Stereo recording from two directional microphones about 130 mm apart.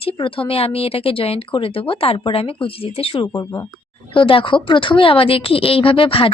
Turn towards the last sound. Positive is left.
turn(degrees=45)  # may be behind; listen again after turning